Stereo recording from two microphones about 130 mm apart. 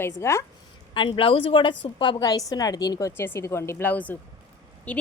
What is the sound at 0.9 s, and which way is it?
A woman's voice, 40° left (ahead or behind).